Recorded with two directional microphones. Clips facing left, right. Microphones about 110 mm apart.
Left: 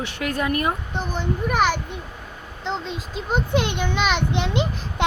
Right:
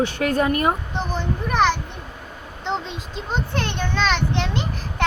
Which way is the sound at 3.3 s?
15° left (ahead or behind).